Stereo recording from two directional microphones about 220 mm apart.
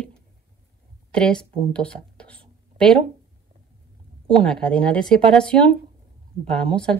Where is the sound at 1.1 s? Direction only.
5° left (ahead or behind).